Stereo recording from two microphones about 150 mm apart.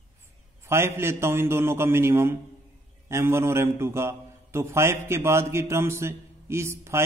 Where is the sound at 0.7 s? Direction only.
15° right (ahead or behind).